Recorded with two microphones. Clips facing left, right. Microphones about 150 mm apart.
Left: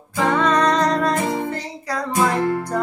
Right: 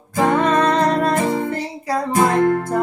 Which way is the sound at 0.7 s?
30° right (ahead or behind).